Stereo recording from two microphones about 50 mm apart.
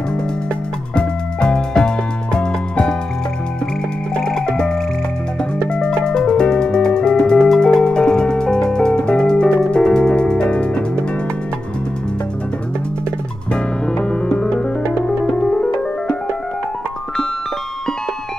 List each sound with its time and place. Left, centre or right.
0.9 s music: centre
4.1 s music: centre
13.5 s music: centre